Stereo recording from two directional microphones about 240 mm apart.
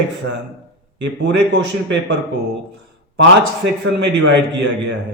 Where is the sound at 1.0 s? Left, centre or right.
Right.